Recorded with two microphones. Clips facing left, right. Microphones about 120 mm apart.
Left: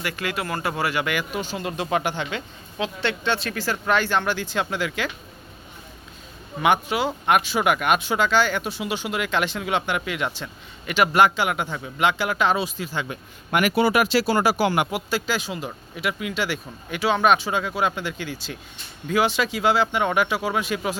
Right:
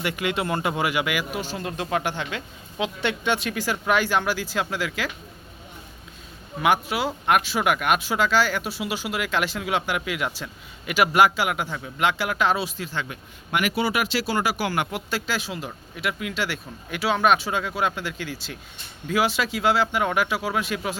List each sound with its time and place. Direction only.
0.0 s speech: 20° right (ahead or behind); by 2.4 s centre (ahead or behind)
2.7 s speech: 15° right (ahead or behind)
6.6 s speech: centre (ahead or behind)
13.5 s speech: 45° left (ahead or behind)
14.6 s speech: 20° left (ahead or behind)
14.9 s speech: centre (ahead or behind)